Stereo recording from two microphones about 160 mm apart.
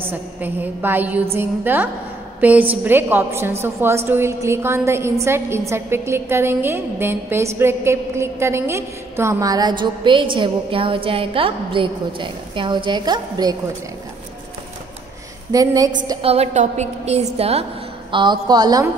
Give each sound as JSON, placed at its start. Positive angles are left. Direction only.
{"t": 0.0, "sound": "a woman's voice", "side_deg": -10}
{"t": 15.5, "sound": "a woman's voice", "side_deg": -20}
{"t": 16.2, "sound": "a woman's voice", "side_deg": -40}
{"t": 18.1, "sound": "a woman's voice", "side_deg": -30}